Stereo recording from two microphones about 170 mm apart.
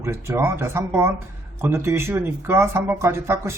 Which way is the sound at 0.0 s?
15° right (ahead or behind).